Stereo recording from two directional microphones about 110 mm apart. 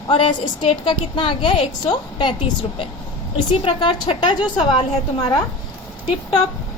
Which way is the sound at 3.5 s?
55° left (ahead or behind).